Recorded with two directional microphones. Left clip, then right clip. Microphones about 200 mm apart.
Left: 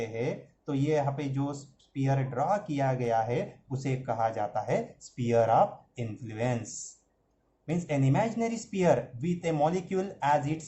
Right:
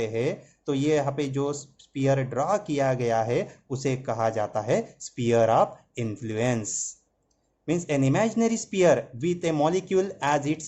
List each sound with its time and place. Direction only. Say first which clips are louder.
0.0 s speech: right 6 dB; 50° right (ahead or behind)
7.9 s speech: right 4 dB; 50° right (ahead or behind)